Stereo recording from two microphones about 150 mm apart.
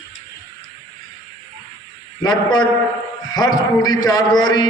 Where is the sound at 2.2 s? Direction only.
30° left (ahead or behind).